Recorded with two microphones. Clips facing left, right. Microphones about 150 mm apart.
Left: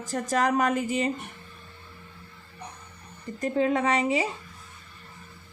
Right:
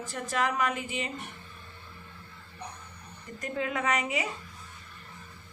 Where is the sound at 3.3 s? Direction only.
35° left (ahead or behind).